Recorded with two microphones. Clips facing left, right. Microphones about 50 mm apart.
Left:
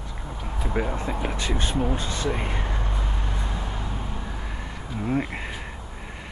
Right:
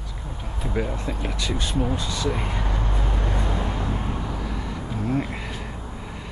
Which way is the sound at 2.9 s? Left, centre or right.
Right.